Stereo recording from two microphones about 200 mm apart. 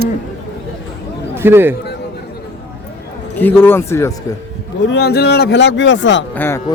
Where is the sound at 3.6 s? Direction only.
10° left (ahead or behind).